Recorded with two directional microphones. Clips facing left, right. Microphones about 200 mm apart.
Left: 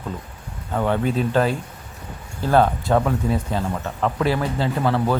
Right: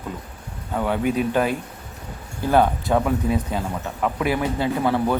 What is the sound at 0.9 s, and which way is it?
Speech, 10° right (ahead or behind).